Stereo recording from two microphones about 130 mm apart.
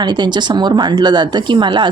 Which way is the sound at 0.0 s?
35° right (ahead or behind).